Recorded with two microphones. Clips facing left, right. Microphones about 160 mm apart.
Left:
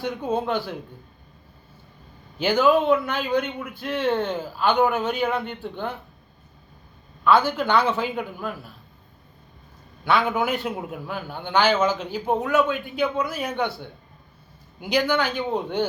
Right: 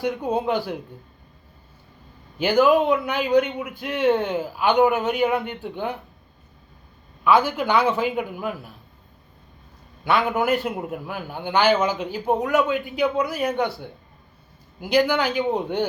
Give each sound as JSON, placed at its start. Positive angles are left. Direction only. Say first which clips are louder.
{"t": 0.3, "sound": "a man's voice", "louder": "even", "side_deg": -15}
{"t": 2.4, "sound": "a man's voice", "louder": "right 2 dB", "side_deg": -10}
{"t": 3.3, "sound": "a man's voice", "louder": "right 6 dB", "side_deg": -75}
{"t": 3.7, "sound": "a man's voice", "louder": "right 3 dB", "side_deg": -15}
{"t": 7.3, "sound": "a man's voice", "louder": "even", "side_deg": -10}
{"t": 10.0, "sound": "a man's voice", "louder": "right 1 dB", "side_deg": -5}
{"t": 14.8, "sound": "speech", "louder": "right 2 dB", "side_deg": -5}